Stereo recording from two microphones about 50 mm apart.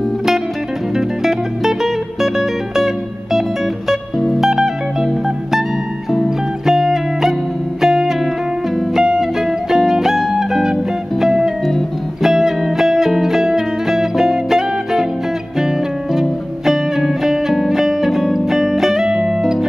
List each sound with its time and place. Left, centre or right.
0.9 s music: centre
4.4 s music: centre
6.6 s music: centre